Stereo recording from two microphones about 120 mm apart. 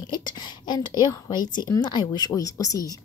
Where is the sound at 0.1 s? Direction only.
35° left (ahead or behind).